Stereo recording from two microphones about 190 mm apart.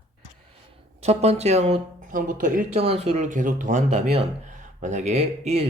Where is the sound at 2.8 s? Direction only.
30° right (ahead or behind).